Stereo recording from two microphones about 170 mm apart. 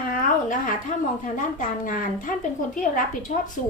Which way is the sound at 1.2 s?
50° left (ahead or behind).